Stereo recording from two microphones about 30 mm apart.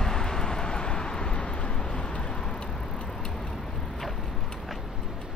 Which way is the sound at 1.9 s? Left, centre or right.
Left.